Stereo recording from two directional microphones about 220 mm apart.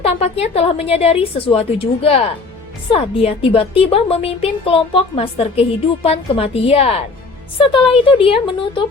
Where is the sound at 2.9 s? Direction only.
25° left (ahead or behind).